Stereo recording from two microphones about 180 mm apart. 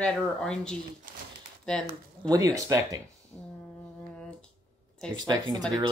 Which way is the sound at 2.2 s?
20° right (ahead or behind).